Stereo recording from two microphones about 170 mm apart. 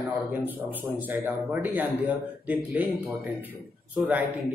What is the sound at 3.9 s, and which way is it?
Speech, 10° right (ahead or behind).